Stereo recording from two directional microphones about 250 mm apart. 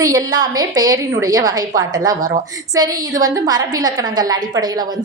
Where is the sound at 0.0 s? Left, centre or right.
Centre.